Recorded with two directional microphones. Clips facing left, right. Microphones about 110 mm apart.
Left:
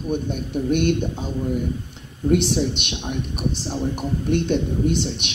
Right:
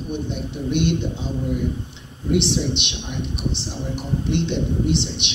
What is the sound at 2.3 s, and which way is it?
A man's voice, 45° left (ahead or behind).